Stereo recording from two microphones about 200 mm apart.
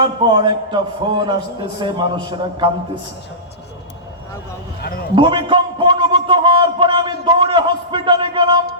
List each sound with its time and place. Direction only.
0.0 s a man's voice: 25° right (ahead or behind)
4.8 s a man's voice: 50° left (ahead or behind)
5.1 s a sound: 25° right (ahead or behind)